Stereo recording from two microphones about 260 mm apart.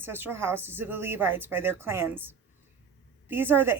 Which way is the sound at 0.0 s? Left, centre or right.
Centre.